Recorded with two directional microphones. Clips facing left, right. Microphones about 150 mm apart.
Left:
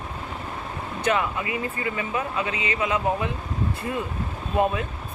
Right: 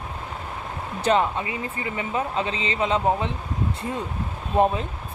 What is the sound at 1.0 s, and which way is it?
Speech, 30° right (ahead or behind).